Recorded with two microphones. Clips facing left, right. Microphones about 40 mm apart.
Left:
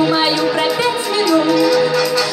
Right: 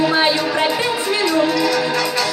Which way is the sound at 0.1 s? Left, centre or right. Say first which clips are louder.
Left 1 dB; right.